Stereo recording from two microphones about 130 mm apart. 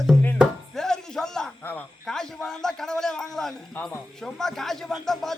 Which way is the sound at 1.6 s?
15° left (ahead or behind).